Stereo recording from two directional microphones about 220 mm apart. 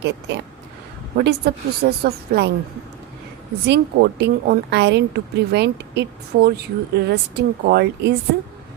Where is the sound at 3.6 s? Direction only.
50° right (ahead or behind).